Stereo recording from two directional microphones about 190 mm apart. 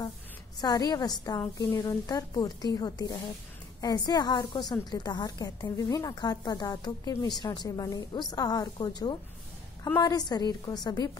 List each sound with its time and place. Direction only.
0.6 s a woman's voice: 20° left (ahead or behind)